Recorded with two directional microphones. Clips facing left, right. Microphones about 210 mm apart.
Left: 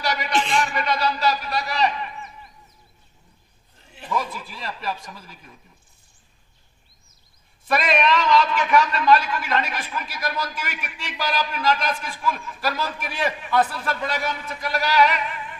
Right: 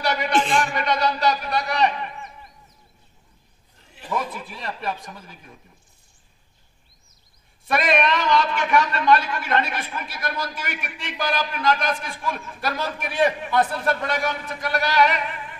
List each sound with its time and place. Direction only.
0.0 s a sound: 55° right (ahead or behind)
4.5 s speech: 55° right (ahead or behind)
7.9 s a man's voice: 55° right (ahead or behind)